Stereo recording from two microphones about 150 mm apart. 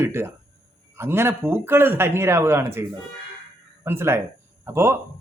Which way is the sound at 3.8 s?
15° right (ahead or behind).